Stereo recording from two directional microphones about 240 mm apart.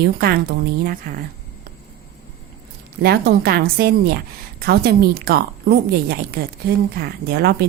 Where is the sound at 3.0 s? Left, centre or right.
Right.